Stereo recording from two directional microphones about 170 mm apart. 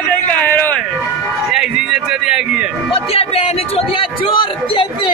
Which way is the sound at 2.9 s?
35° left (ahead or behind).